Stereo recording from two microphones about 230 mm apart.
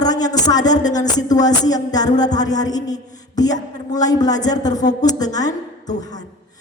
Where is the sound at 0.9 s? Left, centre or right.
Centre.